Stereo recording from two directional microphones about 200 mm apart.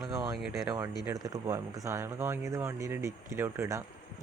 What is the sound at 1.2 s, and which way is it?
Speech, 15° right (ahead or behind).